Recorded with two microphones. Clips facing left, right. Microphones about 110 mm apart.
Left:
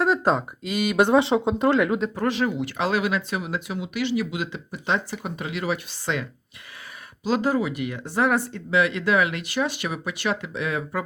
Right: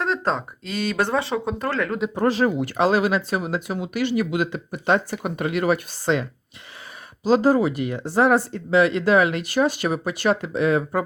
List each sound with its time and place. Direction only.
0.0 s speech: 5° left (ahead or behind)
2.1 s speech: 35° right (ahead or behind)
7.3 s speech: 40° right (ahead or behind)